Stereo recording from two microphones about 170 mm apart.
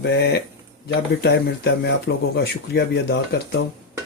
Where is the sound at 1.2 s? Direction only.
75° left (ahead or behind).